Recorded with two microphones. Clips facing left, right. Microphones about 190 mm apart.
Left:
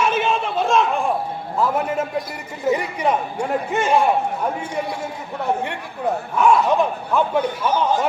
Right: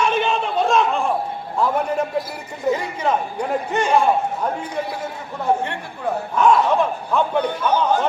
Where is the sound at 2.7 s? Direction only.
15° left (ahead or behind).